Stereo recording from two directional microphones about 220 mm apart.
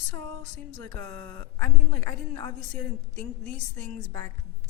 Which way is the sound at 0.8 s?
10° left (ahead or behind).